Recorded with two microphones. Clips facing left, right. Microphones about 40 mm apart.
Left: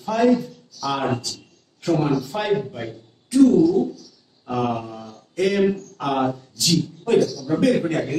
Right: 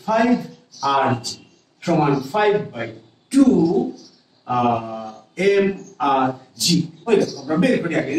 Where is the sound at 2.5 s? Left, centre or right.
Right; by 3.8 s centre.